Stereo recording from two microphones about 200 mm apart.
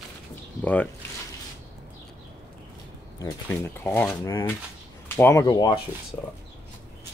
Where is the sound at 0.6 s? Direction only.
10° left (ahead or behind).